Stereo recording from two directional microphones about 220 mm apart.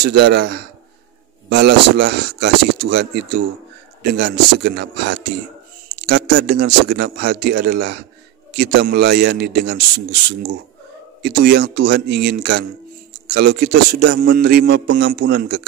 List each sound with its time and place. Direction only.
0.0 s a man's voice: 50° right (ahead or behind)
11.2 s a man's voice: 45° right (ahead or behind)